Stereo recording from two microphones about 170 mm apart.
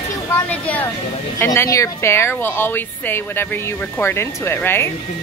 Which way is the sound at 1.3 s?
15° left (ahead or behind).